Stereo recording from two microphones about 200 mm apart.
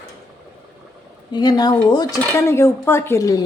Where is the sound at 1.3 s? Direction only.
20° left (ahead or behind).